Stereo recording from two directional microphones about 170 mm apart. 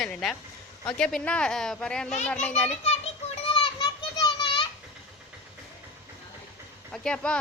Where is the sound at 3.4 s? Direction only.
30° left (ahead or behind).